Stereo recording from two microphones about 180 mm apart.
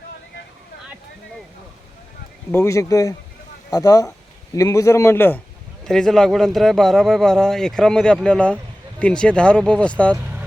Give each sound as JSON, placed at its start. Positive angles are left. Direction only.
{"t": 2.5, "sound": "a man's voice", "side_deg": 15}